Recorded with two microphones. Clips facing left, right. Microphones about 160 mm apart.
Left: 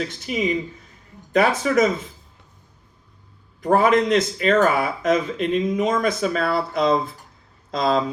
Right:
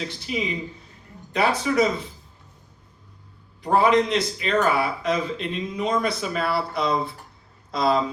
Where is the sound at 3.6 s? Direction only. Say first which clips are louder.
Left 2 dB; 50° left (ahead or behind).